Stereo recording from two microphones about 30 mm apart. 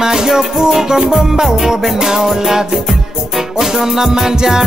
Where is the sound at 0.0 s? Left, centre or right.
Centre.